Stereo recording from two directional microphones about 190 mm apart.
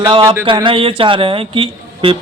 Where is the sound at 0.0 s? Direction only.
20° right (ahead or behind).